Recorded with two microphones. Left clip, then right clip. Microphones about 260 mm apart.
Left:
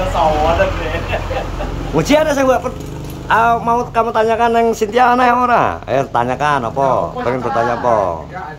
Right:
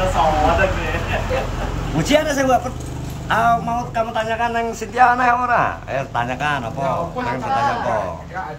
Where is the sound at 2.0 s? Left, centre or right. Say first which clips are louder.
Left 4 dB; centre.